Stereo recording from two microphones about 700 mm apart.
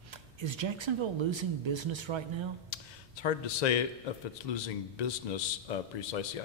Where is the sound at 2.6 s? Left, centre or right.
Left.